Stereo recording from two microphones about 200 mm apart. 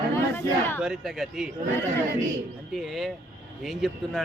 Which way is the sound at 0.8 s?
Centre (ahead or behind).